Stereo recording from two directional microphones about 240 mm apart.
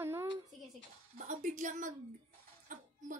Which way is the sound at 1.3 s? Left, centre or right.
Right.